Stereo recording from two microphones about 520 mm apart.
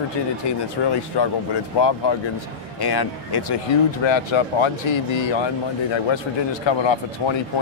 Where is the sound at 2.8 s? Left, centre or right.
Left.